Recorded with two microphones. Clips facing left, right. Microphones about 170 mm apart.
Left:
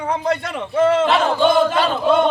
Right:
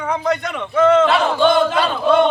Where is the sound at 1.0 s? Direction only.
Centre (ahead or behind).